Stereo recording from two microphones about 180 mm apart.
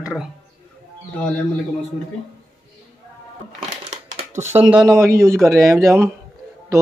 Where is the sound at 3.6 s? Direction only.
40° right (ahead or behind).